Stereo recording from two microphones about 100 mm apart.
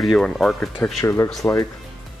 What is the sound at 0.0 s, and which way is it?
Speech, centre (ahead or behind).